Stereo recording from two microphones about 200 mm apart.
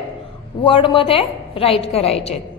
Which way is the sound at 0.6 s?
25° left (ahead or behind).